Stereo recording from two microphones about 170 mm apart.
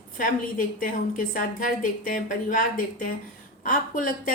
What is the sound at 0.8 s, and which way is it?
A woman's voice, 55° left (ahead or behind).